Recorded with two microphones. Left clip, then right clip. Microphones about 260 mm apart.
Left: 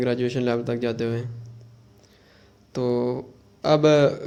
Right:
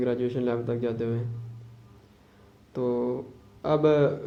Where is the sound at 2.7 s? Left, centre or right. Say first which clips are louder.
Left 3 dB; left.